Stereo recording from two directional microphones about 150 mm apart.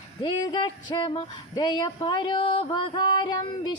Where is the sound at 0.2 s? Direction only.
30° left (ahead or behind).